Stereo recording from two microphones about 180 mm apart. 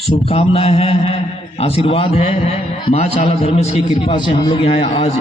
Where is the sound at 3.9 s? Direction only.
25° left (ahead or behind).